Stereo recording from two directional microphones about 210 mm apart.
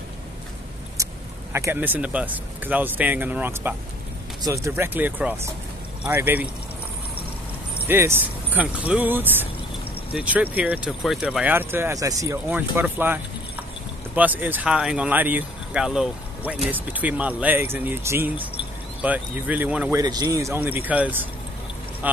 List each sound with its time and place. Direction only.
1.0 s vehicle: 15° right (ahead or behind)
1.5 s speech: 10° right (ahead or behind)
7.8 s speech: 10° right (ahead or behind)
20.0 s speech: 20° right (ahead or behind)